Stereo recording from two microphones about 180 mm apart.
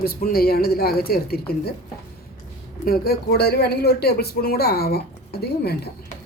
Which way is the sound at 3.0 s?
60° left (ahead or behind).